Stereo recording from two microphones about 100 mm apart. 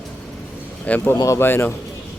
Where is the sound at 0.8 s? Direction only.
15° left (ahead or behind).